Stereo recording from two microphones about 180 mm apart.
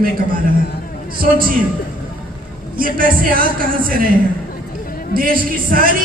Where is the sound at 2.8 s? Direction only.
50° right (ahead or behind).